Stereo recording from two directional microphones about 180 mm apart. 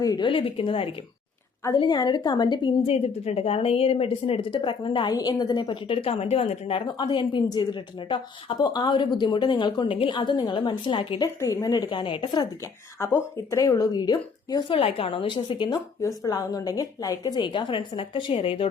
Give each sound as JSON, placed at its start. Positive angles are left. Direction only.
{"t": 0.0, "sound": "a woman's voice", "side_deg": 25}
{"t": 13.0, "sound": "a woman's voice", "side_deg": 15}